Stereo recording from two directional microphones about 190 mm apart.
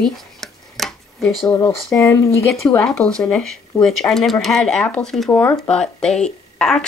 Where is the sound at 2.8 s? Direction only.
5° left (ahead or behind).